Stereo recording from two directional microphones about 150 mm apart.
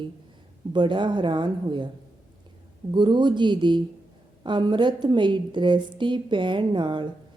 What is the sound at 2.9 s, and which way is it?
A woman's voice, 30° right (ahead or behind).